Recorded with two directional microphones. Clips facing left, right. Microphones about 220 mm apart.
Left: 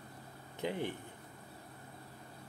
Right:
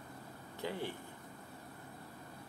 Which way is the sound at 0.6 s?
20° left (ahead or behind).